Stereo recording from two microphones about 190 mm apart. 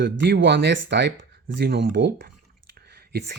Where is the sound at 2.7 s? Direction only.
60° right (ahead or behind).